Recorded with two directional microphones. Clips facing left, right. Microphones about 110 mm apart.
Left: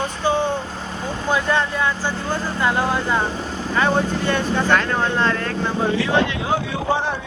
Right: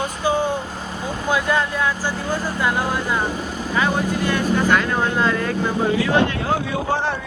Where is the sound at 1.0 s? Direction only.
10° right (ahead or behind).